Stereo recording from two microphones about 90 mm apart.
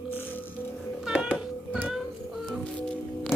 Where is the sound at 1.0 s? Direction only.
10° right (ahead or behind).